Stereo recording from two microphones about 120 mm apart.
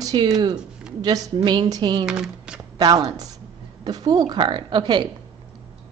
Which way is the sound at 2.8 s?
35° right (ahead or behind).